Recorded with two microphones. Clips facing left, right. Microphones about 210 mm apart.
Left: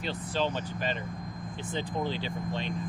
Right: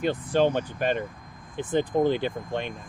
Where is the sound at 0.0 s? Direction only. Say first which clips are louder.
Right 8 dB; 55° right (ahead or behind).